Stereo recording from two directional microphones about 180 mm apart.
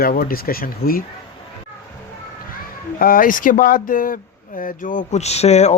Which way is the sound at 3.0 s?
55° left (ahead or behind).